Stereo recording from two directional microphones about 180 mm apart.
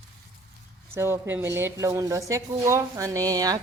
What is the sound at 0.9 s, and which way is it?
Speech, 15° right (ahead or behind).